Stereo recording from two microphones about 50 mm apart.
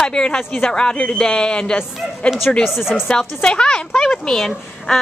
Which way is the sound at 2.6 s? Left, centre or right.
Centre.